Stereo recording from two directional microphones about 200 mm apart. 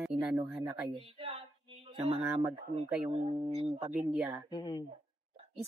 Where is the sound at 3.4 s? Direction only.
30° right (ahead or behind).